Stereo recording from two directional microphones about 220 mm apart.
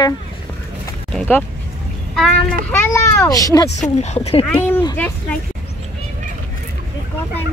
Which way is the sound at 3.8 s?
30° left (ahead or behind).